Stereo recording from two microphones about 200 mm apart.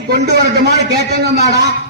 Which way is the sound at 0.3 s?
55° right (ahead or behind).